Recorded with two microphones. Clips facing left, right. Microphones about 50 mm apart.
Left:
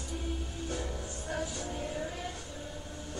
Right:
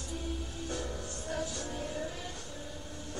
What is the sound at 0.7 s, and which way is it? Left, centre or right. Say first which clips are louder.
Music: even; centre.